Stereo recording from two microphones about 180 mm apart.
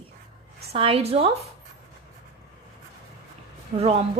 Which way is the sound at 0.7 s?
35° right (ahead or behind).